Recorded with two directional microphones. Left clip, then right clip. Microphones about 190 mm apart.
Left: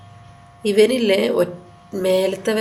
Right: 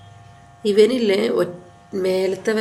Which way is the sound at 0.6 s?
Centre (ahead or behind).